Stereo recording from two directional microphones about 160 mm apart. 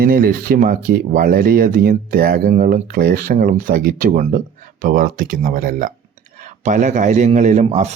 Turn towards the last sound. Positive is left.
turn(degrees=-45)  # may be behind; listen again after turning